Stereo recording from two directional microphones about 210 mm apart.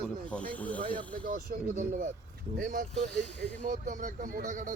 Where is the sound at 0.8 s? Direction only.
25° right (ahead or behind).